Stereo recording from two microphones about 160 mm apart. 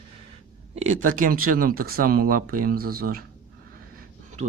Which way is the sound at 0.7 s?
50° right (ahead or behind).